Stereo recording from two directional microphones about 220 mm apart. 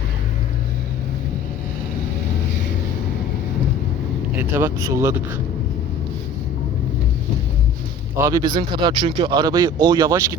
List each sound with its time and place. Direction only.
4.4 s speech: 10° right (ahead or behind)
8.2 s speech: 20° right (ahead or behind)